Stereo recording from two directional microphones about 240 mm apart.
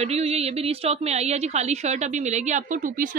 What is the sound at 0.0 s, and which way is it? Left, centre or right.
Speech, right.